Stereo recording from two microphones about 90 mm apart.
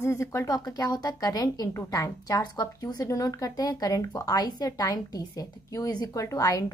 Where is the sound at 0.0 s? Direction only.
35° left (ahead or behind).